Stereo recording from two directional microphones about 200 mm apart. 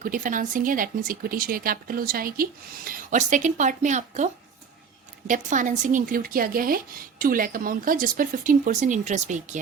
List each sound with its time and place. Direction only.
0.0 s speech: 40° right (ahead or behind)
5.3 s speech: 40° right (ahead or behind)